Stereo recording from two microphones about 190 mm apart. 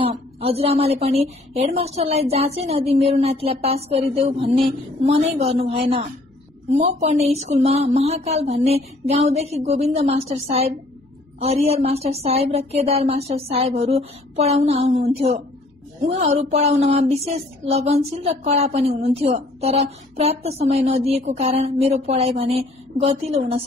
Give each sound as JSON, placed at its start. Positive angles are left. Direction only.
{"t": 0.0, "sound": "a woman's voice", "side_deg": -30}
{"t": 16.1, "sound": "a woman's voice", "side_deg": -35}